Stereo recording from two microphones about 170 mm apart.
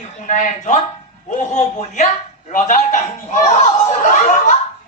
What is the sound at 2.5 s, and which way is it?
Chuckle, 50° left (ahead or behind).